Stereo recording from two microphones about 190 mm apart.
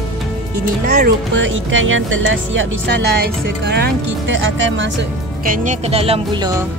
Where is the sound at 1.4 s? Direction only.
90° right.